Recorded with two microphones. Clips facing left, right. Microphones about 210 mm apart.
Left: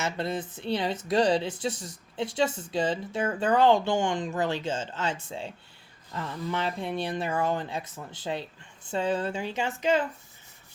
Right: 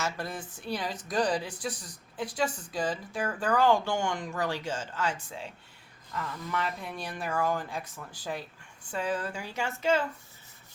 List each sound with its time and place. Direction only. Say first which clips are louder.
0.0 s speech: left 4 dB; 20° left (ahead or behind)